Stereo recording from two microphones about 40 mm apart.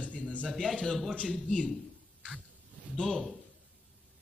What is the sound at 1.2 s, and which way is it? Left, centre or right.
Speech, left.